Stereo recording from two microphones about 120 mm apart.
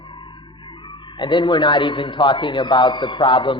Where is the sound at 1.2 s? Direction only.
40° left (ahead or behind).